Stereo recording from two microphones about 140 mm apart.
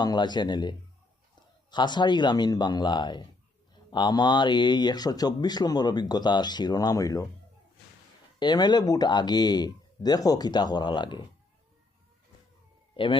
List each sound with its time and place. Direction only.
0.0 s speech: 30° left (ahead or behind)
8.4 s speech: 30° left (ahead or behind)
13.0 s speech: 40° left (ahead or behind)